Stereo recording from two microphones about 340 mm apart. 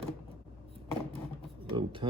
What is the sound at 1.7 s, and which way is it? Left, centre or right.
Speech, centre.